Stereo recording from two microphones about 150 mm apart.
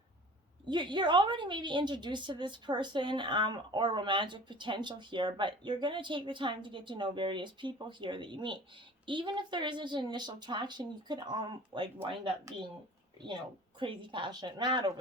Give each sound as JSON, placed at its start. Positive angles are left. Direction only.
{"t": 0.7, "sound": "a woman's voice", "side_deg": -30}
{"t": 13.7, "sound": "a woman's voice", "side_deg": -35}